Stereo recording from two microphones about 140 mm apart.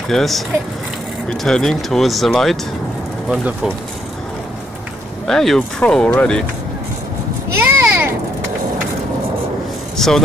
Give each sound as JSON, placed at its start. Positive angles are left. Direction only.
{"t": 0.1, "sound": "speech", "side_deg": 0}
{"t": 5.2, "sound": "speech", "side_deg": 5}
{"t": 7.5, "sound": "a sound", "side_deg": -15}
{"t": 9.9, "sound": "speech", "side_deg": 5}